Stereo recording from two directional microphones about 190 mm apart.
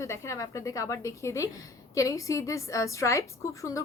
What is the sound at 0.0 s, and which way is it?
A woman's voice, 15° left (ahead or behind).